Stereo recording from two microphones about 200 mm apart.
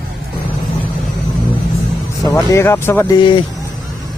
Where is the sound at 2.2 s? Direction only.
15° left (ahead or behind).